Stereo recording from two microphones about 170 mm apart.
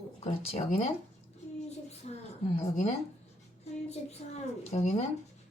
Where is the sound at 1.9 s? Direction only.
40° left (ahead or behind).